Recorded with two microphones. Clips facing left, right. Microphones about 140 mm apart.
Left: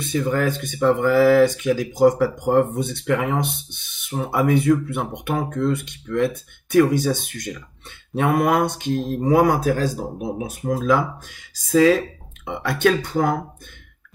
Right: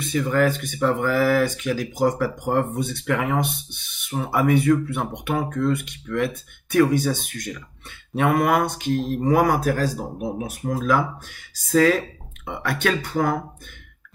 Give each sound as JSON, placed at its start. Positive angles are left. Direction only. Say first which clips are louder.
{"t": 0.1, "sound": "speech", "louder": "right 1 dB", "side_deg": 25}